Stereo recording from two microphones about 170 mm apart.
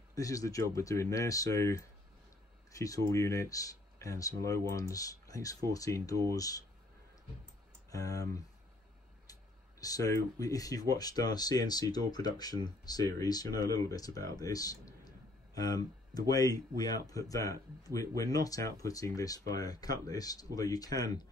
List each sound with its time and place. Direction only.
0.1 s speech: 20° left (ahead or behind)
7.9 s speech: 20° left (ahead or behind)